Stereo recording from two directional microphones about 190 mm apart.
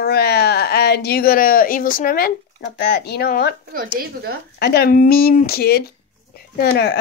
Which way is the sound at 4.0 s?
55° right (ahead or behind).